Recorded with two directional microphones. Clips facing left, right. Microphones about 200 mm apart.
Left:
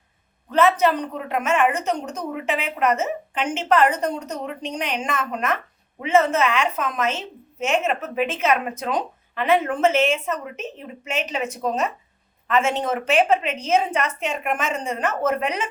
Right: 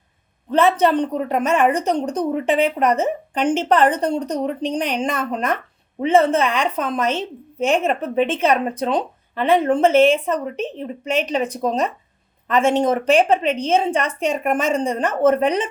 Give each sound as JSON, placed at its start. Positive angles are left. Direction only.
{"t": 0.5, "sound": "a woman's voice", "side_deg": -35}